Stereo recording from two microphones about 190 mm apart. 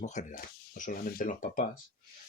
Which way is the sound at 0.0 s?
40° left (ahead or behind).